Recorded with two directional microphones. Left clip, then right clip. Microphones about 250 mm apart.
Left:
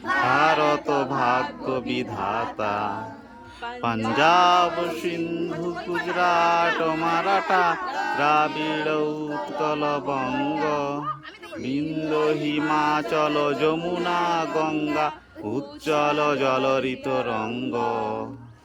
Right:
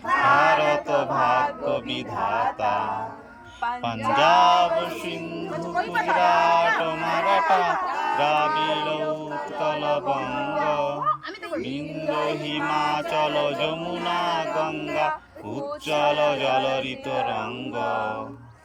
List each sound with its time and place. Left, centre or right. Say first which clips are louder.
0.4 s music: even; centre
2.6 s speech: right 2 dB; centre
3.8 s speech: even; centre
5.7 s speech: right 5 dB; right
6.1 s speech: right 1 dB; centre
12.1 s speech: left 4 dB; centre